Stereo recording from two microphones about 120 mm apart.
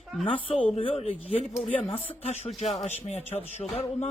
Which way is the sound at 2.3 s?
65° left (ahead or behind).